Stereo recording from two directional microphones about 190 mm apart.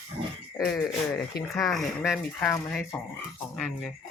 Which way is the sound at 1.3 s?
55° left (ahead or behind).